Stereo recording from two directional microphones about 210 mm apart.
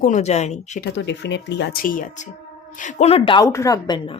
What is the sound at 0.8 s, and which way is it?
Speech, 55° left (ahead or behind).